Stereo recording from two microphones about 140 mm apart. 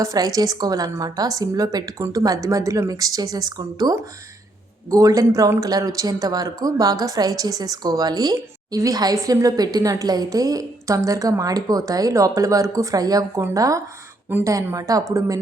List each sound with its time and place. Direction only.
0.0 s a man's voice: 25° right (ahead or behind)